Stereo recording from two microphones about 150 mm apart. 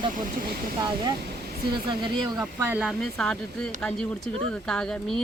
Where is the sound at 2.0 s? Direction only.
30° right (ahead or behind).